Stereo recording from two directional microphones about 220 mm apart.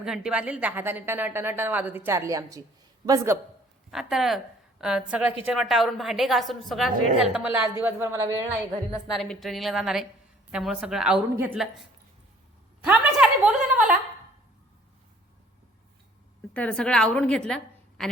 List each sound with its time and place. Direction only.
0.0 s a woman's voice: 5° right (ahead or behind)
3.9 s a woman's voice: centre (ahead or behind)
9.0 s a woman's voice: centre (ahead or behind)
16.6 s a woman's voice: 5° left (ahead or behind)